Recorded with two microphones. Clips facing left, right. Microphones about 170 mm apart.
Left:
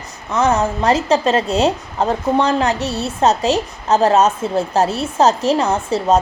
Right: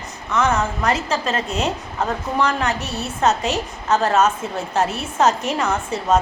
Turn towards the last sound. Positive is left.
turn(degrees=35)  # may be behind; listen again after turning